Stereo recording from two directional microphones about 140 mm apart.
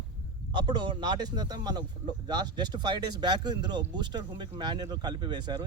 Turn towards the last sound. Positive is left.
turn(degrees=-30)  # may be behind; listen again after turning